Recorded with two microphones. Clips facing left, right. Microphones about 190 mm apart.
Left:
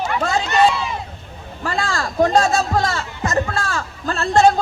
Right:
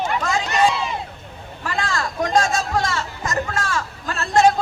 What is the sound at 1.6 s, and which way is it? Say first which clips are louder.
Music: left 2 dB; 40° left (ahead or behind).